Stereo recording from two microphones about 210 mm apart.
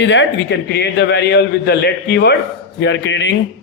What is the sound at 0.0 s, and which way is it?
A man's voice, 60° left (ahead or behind).